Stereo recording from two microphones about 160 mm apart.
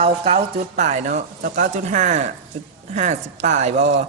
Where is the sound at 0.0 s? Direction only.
40° right (ahead or behind).